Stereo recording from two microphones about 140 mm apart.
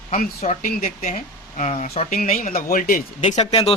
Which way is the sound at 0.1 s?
80° left.